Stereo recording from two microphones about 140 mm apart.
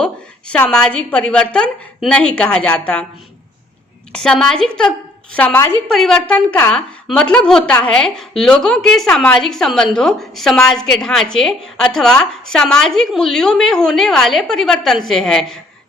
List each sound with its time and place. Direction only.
0.0 s a woman's voice: 10° left (ahead or behind)
4.1 s a woman's voice: 5° left (ahead or behind)